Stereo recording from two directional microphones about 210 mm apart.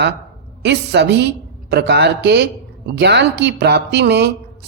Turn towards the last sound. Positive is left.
turn(degrees=-55)  # may be behind; listen again after turning